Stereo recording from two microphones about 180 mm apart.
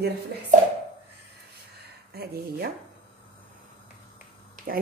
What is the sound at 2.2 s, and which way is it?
Speech, 60° right (ahead or behind).